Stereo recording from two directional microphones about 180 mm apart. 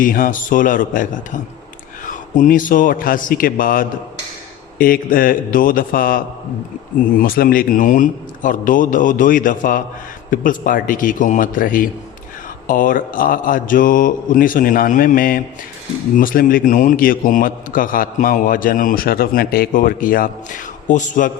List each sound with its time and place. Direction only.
0.0 s a man's voice: 50° left (ahead or behind)